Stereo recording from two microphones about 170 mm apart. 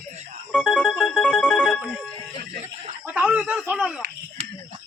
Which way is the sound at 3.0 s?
10° right (ahead or behind).